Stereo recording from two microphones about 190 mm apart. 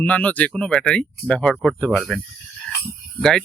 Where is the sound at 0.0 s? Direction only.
10° left (ahead or behind).